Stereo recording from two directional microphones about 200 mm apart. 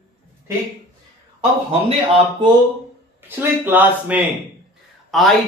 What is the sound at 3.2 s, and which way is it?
Speech, 10° right (ahead or behind).